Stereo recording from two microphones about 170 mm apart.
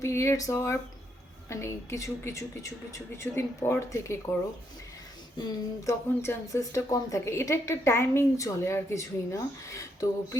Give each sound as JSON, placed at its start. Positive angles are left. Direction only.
{"t": 0.0, "sound": "speech", "side_deg": 15}
{"t": 5.4, "sound": "speech", "side_deg": 20}